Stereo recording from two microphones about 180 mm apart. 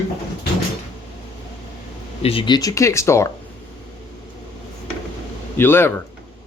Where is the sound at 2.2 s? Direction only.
30° left (ahead or behind); by 3.3 s 15° left (ahead or behind).